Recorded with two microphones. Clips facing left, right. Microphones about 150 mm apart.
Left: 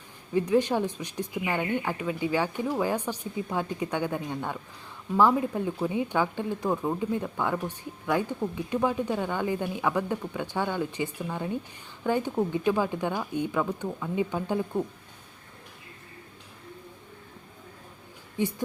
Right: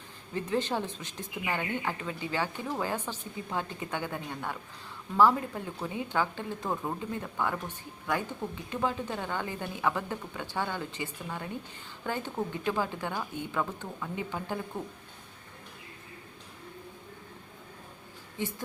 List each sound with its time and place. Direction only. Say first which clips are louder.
0.3 s speech: left 7 dB; 15° left (ahead or behind)
18.4 s speech: left 7 dB; 15° left (ahead or behind)